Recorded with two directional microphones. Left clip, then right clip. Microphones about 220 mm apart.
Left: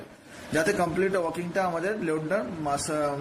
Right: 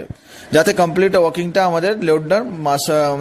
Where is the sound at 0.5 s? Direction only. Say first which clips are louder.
Right 12 dB; 45° right (ahead or behind).